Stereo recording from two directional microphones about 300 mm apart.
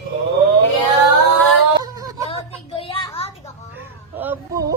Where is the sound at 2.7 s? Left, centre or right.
Centre.